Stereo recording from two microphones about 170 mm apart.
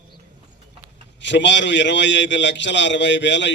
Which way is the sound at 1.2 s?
90° left.